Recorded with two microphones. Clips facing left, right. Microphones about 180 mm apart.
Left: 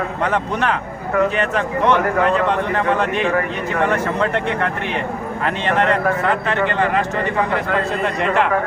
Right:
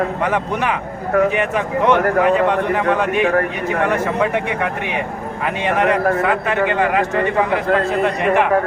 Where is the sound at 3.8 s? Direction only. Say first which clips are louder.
Right 1 dB; 10° right (ahead or behind).